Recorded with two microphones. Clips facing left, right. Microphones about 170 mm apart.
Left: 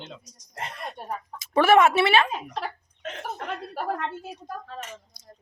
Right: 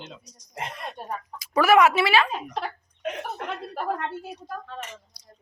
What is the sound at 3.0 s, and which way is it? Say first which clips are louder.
Chuckle: right 3 dB; 10° right (ahead or behind).